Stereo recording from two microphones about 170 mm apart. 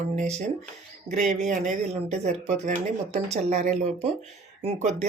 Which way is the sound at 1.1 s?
45° right (ahead or behind).